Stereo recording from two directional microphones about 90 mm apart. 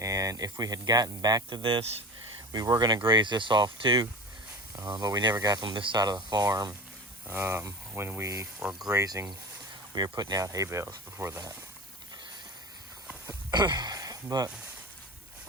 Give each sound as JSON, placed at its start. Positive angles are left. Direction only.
{"t": 0.0, "sound": "speech", "side_deg": -35}
{"t": 1.5, "sound": "speech", "side_deg": -60}
{"t": 2.5, "sound": "speech", "side_deg": -45}
{"t": 4.8, "sound": "speech", "side_deg": -40}
{"t": 6.3, "sound": "speech", "side_deg": -40}
{"t": 7.3, "sound": "speech", "side_deg": -25}
{"t": 8.5, "sound": "speech", "side_deg": -5}
{"t": 8.9, "sound": "speech", "side_deg": -35}
{"t": 9.9, "sound": "speech", "side_deg": -50}
{"t": 13.5, "sound": "speech", "side_deg": -55}